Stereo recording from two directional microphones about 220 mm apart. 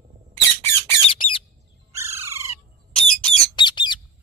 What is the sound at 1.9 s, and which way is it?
Crow, 10° right (ahead or behind).